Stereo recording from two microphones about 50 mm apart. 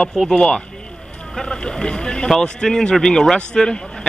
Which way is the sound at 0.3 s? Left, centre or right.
Centre.